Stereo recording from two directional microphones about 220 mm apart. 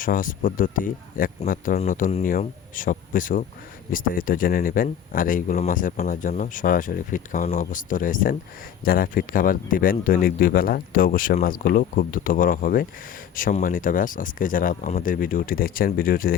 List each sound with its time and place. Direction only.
0.0 s speech: 40° left (ahead or behind)